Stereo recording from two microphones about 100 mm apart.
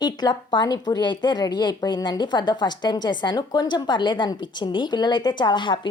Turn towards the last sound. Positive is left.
turn(degrees=50)  # may be behind; listen again after turning